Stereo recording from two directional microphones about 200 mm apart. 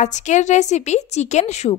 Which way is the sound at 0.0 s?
35° left (ahead or behind).